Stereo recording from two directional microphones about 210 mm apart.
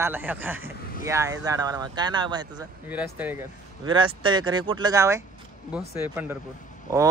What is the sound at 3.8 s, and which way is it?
Speech, 25° right (ahead or behind).